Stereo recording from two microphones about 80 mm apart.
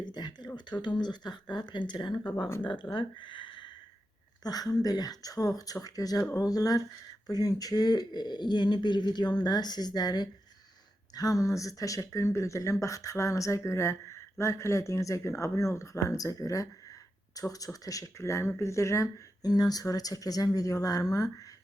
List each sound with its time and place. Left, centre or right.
0.0 s speech: left
2.9 s speech: left
4.4 s speech: left
11.1 s speech: left
19.4 s speech: left